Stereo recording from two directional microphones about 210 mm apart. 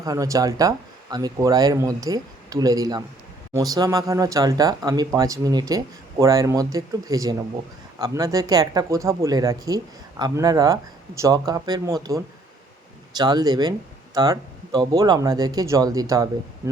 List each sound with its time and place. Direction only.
0.0 s speech: 15° right (ahead or behind)